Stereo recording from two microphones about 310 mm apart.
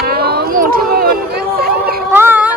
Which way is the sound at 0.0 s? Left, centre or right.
Right.